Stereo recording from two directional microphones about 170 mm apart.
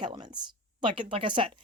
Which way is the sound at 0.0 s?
25° right (ahead or behind).